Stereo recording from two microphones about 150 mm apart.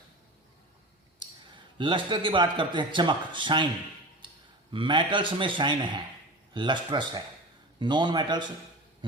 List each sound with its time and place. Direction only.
1.8 s a man's voice: 35° right (ahead or behind)
4.7 s a man's voice: 35° right (ahead or behind)